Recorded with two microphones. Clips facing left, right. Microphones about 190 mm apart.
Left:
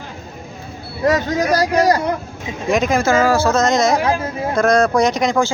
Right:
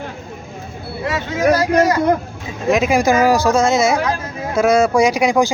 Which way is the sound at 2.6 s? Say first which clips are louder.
Right 2 dB; 5° right (ahead or behind).